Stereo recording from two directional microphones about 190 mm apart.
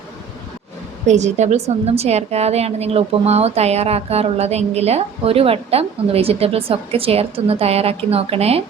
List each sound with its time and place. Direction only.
1.0 s a woman's voice: 40° right (ahead or behind)